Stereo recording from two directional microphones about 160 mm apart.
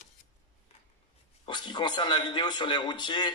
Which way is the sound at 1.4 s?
30° left (ahead or behind).